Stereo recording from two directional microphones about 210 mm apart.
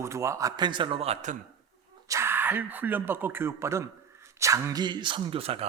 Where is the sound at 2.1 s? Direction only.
10° right (ahead or behind); by 5.6 s 30° right (ahead or behind).